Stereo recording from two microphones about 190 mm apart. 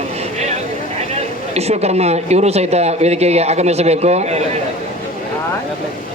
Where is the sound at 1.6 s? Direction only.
35° right (ahead or behind).